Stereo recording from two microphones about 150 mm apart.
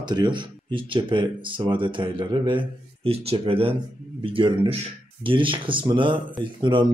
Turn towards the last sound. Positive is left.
turn(degrees=-30)  # may be behind; listen again after turning